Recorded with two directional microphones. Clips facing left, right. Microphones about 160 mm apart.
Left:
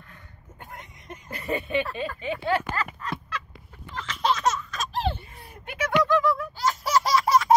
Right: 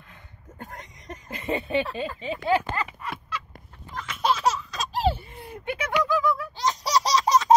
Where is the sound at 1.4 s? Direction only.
30° right (ahead or behind).